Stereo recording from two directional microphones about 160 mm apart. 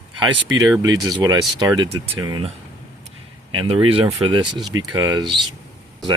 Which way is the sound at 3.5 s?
35° right (ahead or behind).